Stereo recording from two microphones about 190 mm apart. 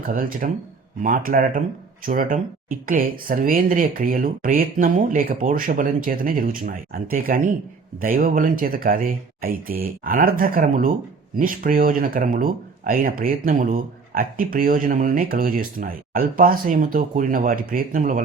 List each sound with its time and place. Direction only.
0.0 s speech: 50° right (ahead or behind)